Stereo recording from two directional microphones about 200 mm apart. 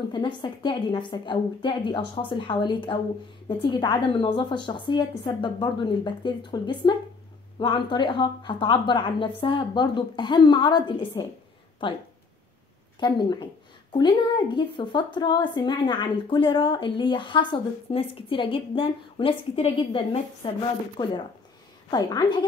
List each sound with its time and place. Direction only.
0.1 s a woman's voice: 25° left (ahead or behind)
13.0 s a woman's voice: 20° left (ahead or behind)